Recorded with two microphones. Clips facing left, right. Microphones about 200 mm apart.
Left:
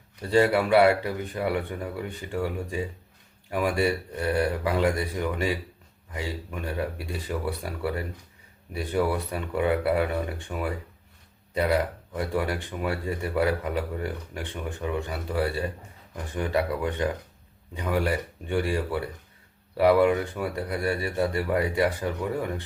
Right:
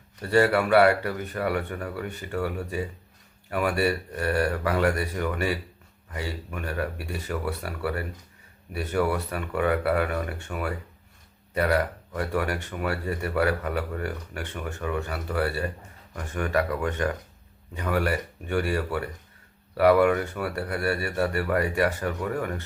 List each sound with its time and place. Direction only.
0.2 s speech: 15° left (ahead or behind)